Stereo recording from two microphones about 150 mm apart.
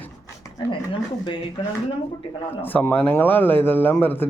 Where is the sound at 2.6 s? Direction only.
15° left (ahead or behind).